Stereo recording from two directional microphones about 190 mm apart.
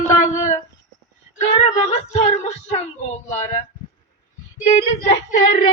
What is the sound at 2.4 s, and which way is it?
Child singing, 35° left (ahead or behind).